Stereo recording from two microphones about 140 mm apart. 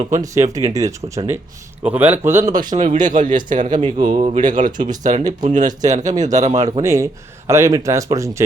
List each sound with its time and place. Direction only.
0.2 s speech: 25° right (ahead or behind)
1.8 s a man's voice: 10° right (ahead or behind)
2.7 s speech: 65° right (ahead or behind)
3.8 s speech: 35° right (ahead or behind)
4.4 s speech: 65° right (ahead or behind)
6.8 s speech: 20° right (ahead or behind)